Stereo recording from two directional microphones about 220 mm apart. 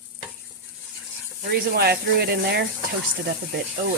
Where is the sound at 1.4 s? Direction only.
45° right (ahead or behind).